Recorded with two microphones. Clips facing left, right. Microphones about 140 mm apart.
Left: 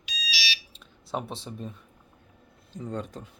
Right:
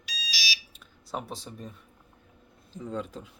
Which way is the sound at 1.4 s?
Centre (ahead or behind).